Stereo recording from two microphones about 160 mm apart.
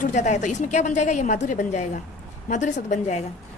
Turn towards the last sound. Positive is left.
turn(degrees=50)  # may be behind; listen again after turning